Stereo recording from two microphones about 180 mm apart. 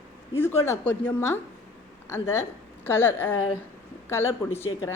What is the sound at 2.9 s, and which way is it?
Speech, 10° left (ahead or behind).